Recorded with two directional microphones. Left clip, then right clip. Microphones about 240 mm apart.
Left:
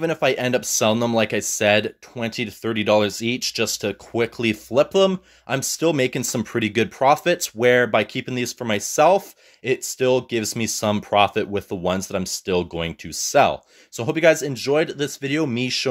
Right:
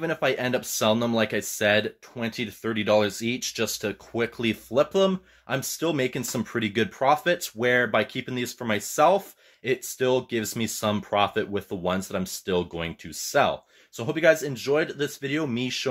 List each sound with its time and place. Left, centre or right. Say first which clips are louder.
0.0 s speech: left 5 dB; left